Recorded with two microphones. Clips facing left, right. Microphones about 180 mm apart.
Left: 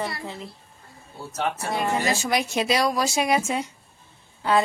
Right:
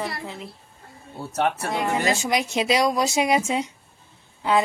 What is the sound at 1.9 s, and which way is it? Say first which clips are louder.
Speech: right 2 dB; 20° right (ahead or behind).